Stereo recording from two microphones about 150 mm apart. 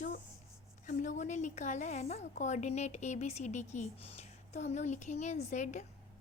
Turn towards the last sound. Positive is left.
turn(degrees=55)  # may be behind; listen again after turning